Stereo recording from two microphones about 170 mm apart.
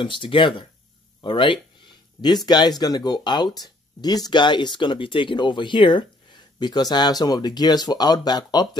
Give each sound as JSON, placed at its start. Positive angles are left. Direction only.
{"t": 0.0, "sound": "speech", "side_deg": 30}